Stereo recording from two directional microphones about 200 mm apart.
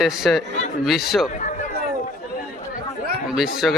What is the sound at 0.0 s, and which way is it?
Speech, centre (ahead or behind).